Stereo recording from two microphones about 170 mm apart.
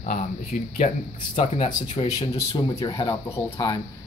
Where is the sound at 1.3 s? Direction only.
30° left (ahead or behind).